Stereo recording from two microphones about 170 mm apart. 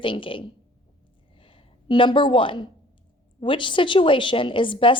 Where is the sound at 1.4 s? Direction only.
30° left (ahead or behind).